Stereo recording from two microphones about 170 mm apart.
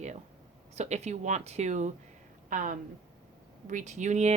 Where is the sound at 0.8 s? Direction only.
40° right (ahead or behind).